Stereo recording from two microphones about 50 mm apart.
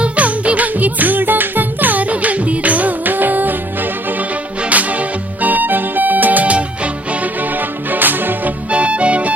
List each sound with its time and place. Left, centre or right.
0.0 s music: right
4.7 s music: right
7.5 s music: right
8.7 s music: right